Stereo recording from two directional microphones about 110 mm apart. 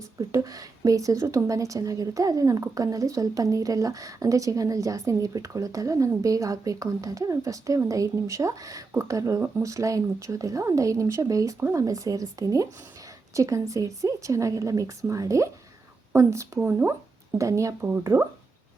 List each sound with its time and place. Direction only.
0.2 s a woman's voice: 30° right (ahead or behind)